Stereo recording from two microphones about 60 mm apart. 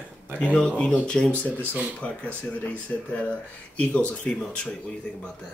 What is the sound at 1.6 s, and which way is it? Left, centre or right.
Speech, right.